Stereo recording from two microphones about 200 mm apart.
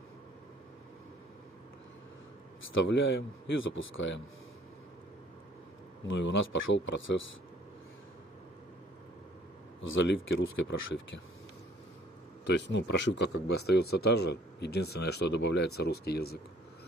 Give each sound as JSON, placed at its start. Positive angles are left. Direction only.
{"t": 2.7, "sound": "speech", "side_deg": 65}
{"t": 6.0, "sound": "speech", "side_deg": 70}
{"t": 9.8, "sound": "speech", "side_deg": 70}
{"t": 12.4, "sound": "speech", "side_deg": 60}